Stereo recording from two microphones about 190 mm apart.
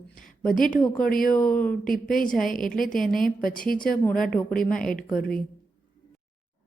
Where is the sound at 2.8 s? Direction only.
45° left (ahead or behind).